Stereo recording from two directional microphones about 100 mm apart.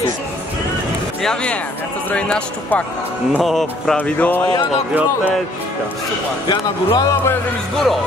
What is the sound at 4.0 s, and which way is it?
Speech, 15° left (ahead or behind).